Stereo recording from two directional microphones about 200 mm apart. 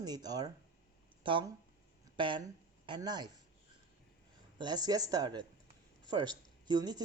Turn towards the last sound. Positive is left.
turn(degrees=-20)  # may be behind; listen again after turning